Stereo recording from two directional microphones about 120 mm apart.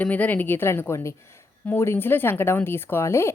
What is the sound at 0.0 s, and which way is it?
A woman's voice, 15° left (ahead or behind).